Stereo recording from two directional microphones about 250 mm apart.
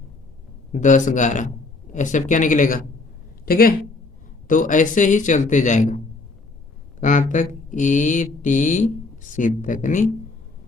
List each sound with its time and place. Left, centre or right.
0.7 s a man's voice: left
7.0 s speech: left